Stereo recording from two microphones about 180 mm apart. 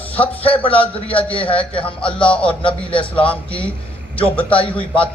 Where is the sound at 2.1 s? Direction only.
5° left (ahead or behind).